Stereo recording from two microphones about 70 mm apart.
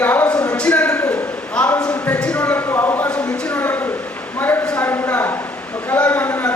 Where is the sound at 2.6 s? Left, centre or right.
Left.